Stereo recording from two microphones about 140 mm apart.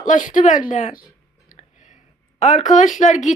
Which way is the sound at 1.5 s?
60° left (ahead or behind).